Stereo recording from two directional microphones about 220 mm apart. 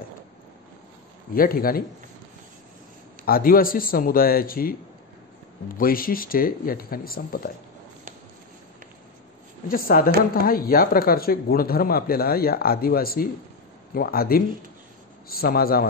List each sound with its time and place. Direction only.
1.3 s speech: 40° left (ahead or behind)
3.3 s speech: 40° left (ahead or behind)
9.7 s speech: 40° left (ahead or behind)